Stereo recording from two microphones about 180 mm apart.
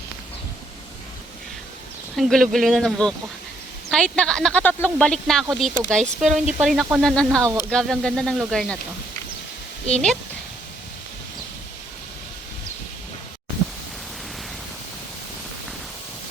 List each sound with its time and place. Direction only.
2.1 s speech: centre (ahead or behind)
6.2 s speech: 40° right (ahead or behind)
6.5 s speech: 5° right (ahead or behind)
9.9 s speech: 5° left (ahead or behind)